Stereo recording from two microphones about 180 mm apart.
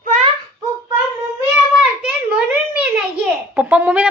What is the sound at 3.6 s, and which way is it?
Speech, 5° right (ahead or behind).